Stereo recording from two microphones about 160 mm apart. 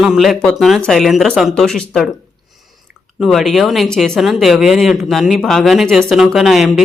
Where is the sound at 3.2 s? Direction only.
Centre (ahead or behind).